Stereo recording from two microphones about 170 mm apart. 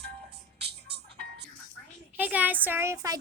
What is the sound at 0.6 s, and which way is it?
Music, 80° right.